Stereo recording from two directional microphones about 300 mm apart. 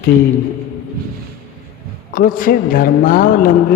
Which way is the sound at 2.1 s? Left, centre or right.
Left.